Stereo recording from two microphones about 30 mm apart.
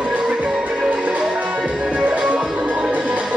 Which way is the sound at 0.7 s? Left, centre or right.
Right.